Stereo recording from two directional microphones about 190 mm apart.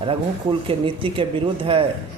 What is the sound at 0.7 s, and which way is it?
Speech, 30° right (ahead or behind).